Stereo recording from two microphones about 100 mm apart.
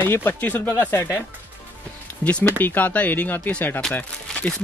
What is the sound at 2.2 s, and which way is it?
Speech, 10° left (ahead or behind).